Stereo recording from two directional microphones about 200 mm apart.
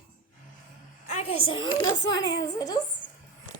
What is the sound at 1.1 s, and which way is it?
A child's voice, 30° left (ahead or behind).